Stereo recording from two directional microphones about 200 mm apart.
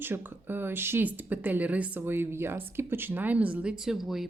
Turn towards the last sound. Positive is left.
turn(degrees=0)  # may be behind; listen again after turning